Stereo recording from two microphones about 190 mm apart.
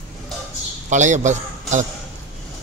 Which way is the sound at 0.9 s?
40° right (ahead or behind).